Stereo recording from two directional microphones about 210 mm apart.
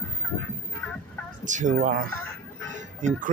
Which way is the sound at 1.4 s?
35° right (ahead or behind).